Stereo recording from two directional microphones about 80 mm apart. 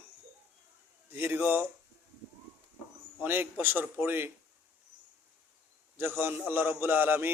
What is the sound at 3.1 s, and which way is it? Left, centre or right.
Speech, right.